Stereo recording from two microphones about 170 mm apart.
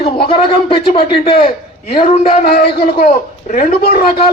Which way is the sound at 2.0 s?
60° left (ahead or behind).